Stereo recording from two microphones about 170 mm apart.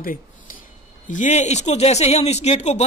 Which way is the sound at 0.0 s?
55° left (ahead or behind).